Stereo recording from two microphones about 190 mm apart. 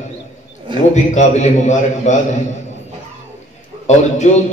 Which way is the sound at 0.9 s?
40° left (ahead or behind).